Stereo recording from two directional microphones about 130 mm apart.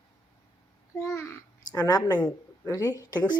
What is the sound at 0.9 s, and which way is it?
A woman's voice, 20° left (ahead or behind).